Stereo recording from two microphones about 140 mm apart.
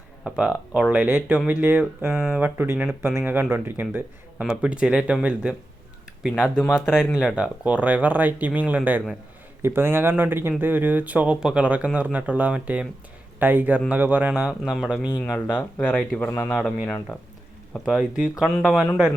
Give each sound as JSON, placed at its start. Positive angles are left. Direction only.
{"t": 0.3, "sound": "speech", "side_deg": -5}
{"t": 2.0, "sound": "speech", "side_deg": 0}
{"t": 2.4, "sound": "speech", "side_deg": -10}
{"t": 6.7, "sound": "speech", "side_deg": 5}